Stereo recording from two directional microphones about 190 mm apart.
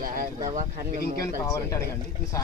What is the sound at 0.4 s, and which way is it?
Speech, 45° right (ahead or behind).